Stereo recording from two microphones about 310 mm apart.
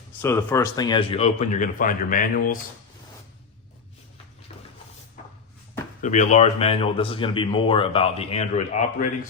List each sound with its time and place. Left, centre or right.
0.2 s speech: centre; by 2.6 s left
6.0 s speech: left